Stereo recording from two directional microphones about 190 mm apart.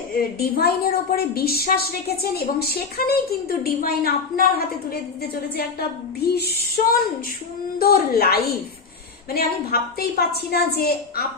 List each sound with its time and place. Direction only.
0.5 s a woman's voice: 55° left (ahead or behind)
6.2 s a woman's voice: 55° left (ahead or behind)